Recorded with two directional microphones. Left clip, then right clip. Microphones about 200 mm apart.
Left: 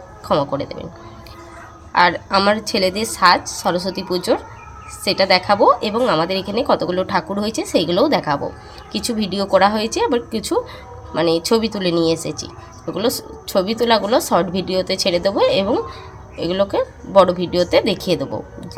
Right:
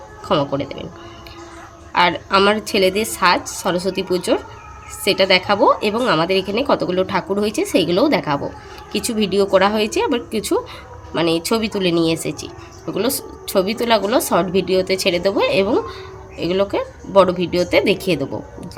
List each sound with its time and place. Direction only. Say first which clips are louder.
0.3 s speech: even; 5° right (ahead or behind)
1.9 s speech: left 1 dB; 5° right (ahead or behind)